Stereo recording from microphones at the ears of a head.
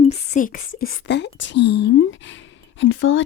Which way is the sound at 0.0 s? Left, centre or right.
Left.